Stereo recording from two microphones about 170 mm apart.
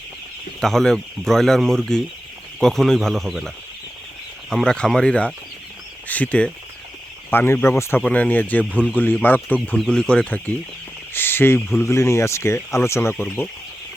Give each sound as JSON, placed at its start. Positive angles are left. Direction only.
{"t": 0.6, "sound": "speech", "side_deg": 0}
{"t": 9.6, "sound": "speech", "side_deg": 0}
{"t": 11.1, "sound": "a sound", "side_deg": 15}
{"t": 11.8, "sound": "speech", "side_deg": 15}